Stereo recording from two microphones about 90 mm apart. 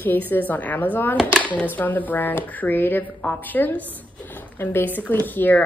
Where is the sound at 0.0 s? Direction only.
20° left (ahead or behind).